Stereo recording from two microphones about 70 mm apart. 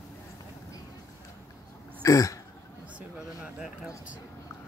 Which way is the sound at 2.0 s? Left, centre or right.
Left.